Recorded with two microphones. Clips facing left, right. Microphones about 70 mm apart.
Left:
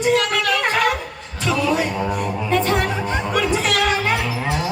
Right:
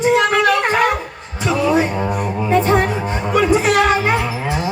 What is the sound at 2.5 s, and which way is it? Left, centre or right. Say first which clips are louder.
Music: right 5 dB; right.